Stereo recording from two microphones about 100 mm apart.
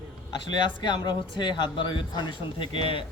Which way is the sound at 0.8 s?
50° left (ahead or behind).